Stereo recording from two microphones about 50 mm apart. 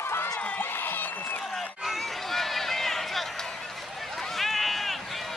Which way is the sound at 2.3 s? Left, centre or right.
Centre.